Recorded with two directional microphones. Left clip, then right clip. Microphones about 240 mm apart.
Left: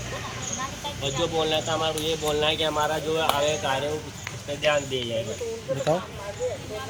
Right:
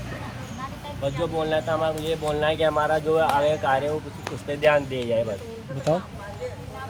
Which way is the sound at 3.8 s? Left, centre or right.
Right.